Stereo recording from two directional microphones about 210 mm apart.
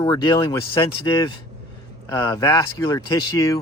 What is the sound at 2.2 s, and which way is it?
Speech, 15° left (ahead or behind).